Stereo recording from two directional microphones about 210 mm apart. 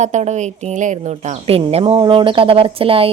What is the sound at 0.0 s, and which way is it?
A woman's voice, 35° right (ahead or behind).